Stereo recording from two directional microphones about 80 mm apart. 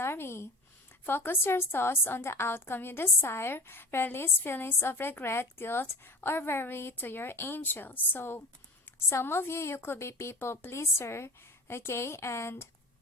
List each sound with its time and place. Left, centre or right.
0.0 s a woman's voice: left